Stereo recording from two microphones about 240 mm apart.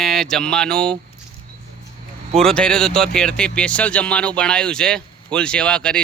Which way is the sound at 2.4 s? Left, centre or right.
Centre.